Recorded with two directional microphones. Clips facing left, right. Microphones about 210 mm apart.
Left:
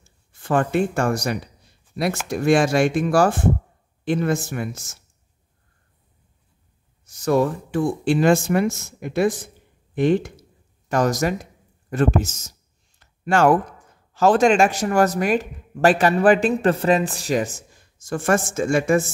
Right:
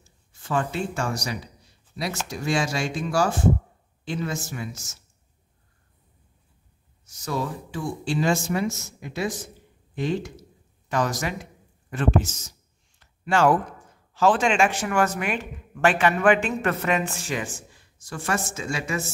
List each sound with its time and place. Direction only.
0.3 s speech: 55° left (ahead or behind)
7.1 s speech: 55° left (ahead or behind)
10.9 s speech: 45° left (ahead or behind)
13.0 s a sound: 45° left (ahead or behind)
14.1 s speech: 40° left (ahead or behind)